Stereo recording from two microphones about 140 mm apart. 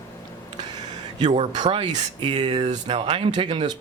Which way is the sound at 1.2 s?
60° right (ahead or behind).